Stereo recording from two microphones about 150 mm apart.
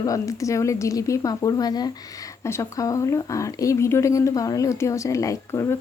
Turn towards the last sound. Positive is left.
turn(degrees=20)  # may be behind; listen again after turning